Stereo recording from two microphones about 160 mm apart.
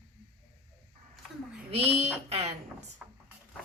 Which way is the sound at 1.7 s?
40° right (ahead or behind).